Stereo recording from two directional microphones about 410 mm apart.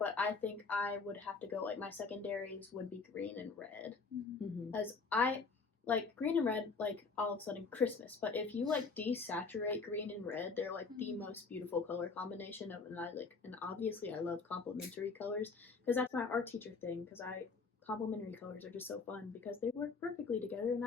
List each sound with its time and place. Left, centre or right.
0.0 s a woman's voice: centre